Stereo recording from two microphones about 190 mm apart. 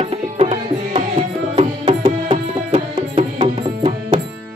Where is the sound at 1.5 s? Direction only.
25° right (ahead or behind).